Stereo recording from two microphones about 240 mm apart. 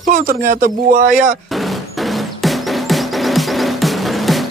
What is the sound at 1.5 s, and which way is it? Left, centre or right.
Music, centre.